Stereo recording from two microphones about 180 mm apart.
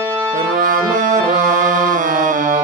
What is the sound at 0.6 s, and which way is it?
Music, 45° right (ahead or behind).